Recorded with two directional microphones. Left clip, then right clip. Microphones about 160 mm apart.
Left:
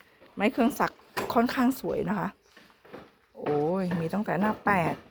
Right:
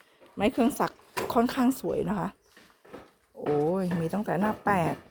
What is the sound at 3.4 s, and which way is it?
Speech, 20° right (ahead or behind).